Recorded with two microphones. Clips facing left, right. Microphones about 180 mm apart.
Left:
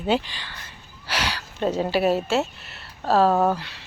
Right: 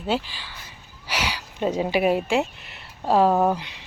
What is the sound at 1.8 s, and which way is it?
Speech, 15° right (ahead or behind).